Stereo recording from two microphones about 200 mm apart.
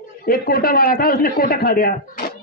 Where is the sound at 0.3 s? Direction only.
50° left (ahead or behind).